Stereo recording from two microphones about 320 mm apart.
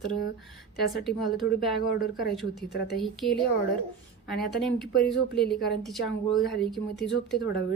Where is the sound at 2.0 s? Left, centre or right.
Left.